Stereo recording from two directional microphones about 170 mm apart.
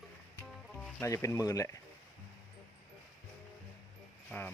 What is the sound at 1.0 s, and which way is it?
Speech, 15° left (ahead or behind).